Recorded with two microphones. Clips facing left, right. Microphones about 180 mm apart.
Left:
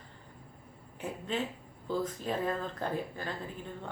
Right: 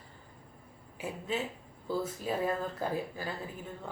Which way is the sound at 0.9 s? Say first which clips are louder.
Even; 5° right (ahead or behind).